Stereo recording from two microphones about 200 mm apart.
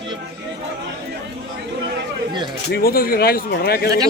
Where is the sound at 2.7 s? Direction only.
45° left (ahead or behind).